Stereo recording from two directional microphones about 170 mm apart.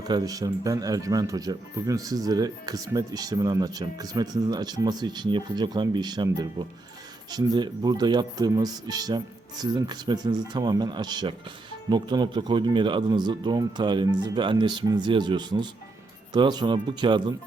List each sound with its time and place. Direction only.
0.0 s speech: 20° right (ahead or behind)